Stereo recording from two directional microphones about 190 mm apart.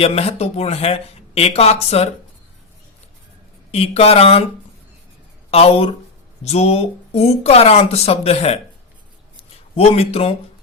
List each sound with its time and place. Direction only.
0.0 s speech: 35° left (ahead or behind)
3.7 s speech: 30° left (ahead or behind)
5.5 s speech: 30° left (ahead or behind)
9.7 s speech: 30° left (ahead or behind)